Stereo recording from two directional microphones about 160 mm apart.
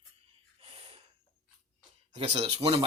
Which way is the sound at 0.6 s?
35° right (ahead or behind).